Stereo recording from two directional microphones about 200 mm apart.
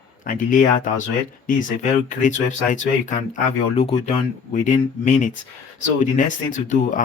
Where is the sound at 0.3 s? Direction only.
40° left (ahead or behind).